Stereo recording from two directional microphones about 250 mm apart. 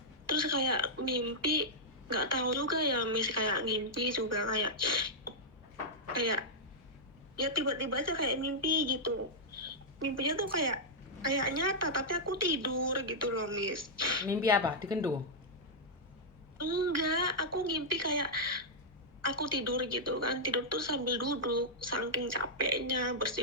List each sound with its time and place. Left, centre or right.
0.3 s a woman's voice: right
10.2 s a woman's voice: right
14.3 s speech: centre
16.6 s a woman's voice: right